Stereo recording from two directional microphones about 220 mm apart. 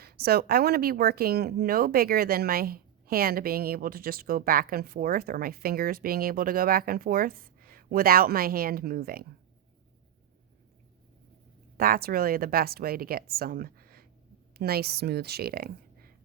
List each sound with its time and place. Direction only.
0.0 s speech: 45° right (ahead or behind)
11.8 s speech: 40° right (ahead or behind)